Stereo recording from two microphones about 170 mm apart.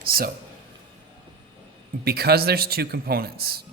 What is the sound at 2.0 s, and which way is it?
Speech, 65° right (ahead or behind).